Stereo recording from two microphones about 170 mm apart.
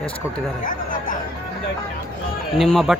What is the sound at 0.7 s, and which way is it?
Music, 55° left (ahead or behind).